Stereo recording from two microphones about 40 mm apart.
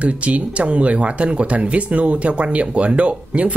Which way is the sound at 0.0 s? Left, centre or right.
Right.